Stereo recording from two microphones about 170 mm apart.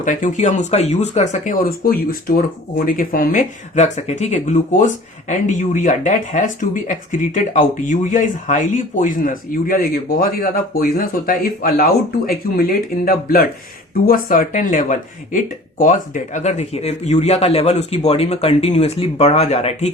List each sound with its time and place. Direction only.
0.0 s speech: 50° left (ahead or behind)